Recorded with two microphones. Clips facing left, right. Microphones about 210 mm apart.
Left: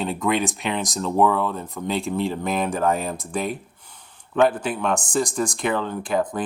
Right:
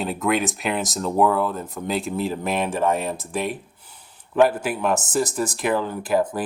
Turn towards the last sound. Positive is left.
turn(degrees=-5)  # may be behind; listen again after turning